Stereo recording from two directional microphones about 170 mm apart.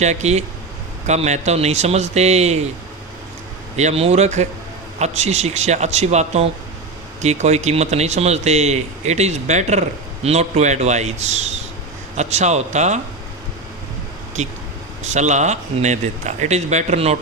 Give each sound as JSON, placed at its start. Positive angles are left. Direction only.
{"t": 0.0, "sound": "speech", "side_deg": -40}
{"t": 3.8, "sound": "speech", "side_deg": -40}
{"t": 14.4, "sound": "speech", "side_deg": -45}